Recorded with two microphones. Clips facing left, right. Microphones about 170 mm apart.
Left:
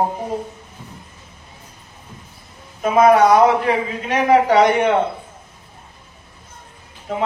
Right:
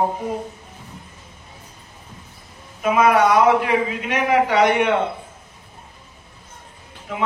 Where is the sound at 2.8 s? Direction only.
35° left (ahead or behind).